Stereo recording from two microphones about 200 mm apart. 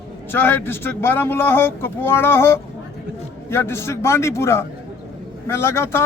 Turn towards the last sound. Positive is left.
turn(degrees=10)  # may be behind; listen again after turning